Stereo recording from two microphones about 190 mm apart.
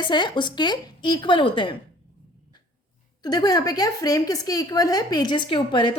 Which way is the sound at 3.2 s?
20° left (ahead or behind).